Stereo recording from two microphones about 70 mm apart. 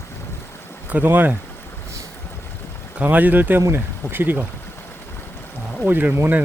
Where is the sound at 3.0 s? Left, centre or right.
Right.